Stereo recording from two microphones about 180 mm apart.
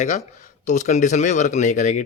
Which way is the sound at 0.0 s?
40° left (ahead or behind).